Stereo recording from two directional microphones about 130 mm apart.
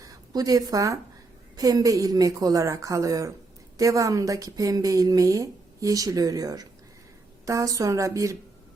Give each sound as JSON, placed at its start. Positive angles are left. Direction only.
{"t": 0.0, "sound": "a woman's voice", "side_deg": -30}